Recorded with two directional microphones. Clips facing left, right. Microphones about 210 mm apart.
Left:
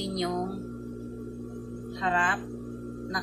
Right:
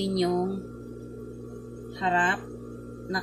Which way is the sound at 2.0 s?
30° right (ahead or behind).